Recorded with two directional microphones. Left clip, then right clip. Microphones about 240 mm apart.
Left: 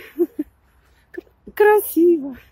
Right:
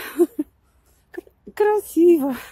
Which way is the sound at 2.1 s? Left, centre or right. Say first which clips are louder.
Right 2 dB; right.